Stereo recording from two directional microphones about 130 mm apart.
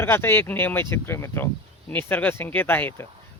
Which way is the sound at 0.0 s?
15° left (ahead or behind).